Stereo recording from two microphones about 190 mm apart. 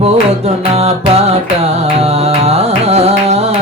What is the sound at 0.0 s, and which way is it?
Music, 30° right (ahead or behind).